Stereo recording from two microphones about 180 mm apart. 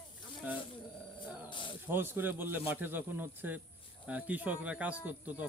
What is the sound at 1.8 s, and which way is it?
Speech, 10° right (ahead or behind).